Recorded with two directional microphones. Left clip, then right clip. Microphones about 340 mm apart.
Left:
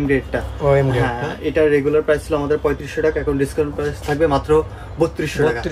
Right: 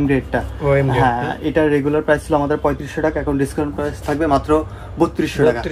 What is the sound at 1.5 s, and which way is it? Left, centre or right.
Speech, centre.